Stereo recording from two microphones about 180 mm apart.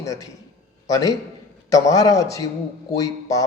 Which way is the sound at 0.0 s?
20° left (ahead or behind).